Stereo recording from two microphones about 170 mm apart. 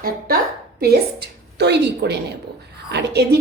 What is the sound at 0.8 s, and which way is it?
A woman's voice, 70° right (ahead or behind).